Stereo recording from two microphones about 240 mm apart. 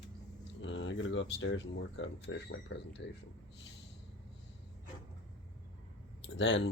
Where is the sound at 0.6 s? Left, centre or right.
Left.